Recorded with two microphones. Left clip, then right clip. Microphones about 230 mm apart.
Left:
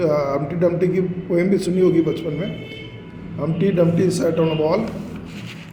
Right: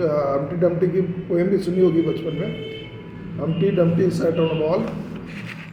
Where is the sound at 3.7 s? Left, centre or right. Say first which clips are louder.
Left 3 dB; left.